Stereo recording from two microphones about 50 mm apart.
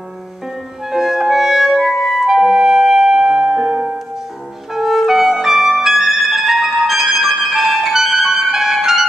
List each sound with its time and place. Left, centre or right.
0.9 s clarinet: centre
1.8 s music: centre